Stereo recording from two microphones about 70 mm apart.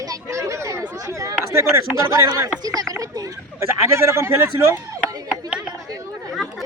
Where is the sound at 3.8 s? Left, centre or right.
Right.